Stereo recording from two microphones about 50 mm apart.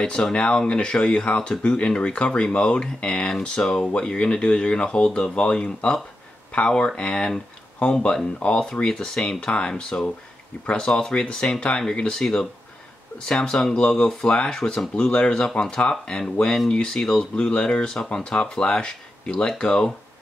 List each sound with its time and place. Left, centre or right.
0.0 s speech: centre